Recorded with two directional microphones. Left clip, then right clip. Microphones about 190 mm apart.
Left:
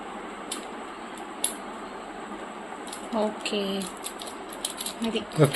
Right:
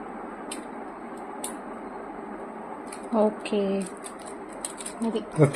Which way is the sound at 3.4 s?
40° right (ahead or behind).